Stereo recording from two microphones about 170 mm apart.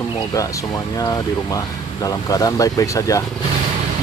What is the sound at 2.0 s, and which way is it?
Speech, 20° left (ahead or behind).